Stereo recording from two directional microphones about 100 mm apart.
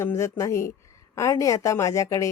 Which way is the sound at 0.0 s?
25° left (ahead or behind).